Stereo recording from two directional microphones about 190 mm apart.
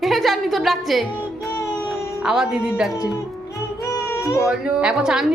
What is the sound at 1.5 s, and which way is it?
Music, 10° left (ahead or behind).